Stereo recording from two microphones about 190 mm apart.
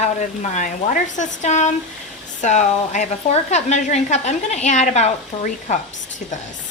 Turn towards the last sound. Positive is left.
turn(degrees=40)  # may be behind; listen again after turning